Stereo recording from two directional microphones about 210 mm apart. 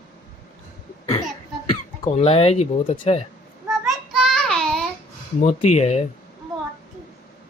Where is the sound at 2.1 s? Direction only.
30° left (ahead or behind).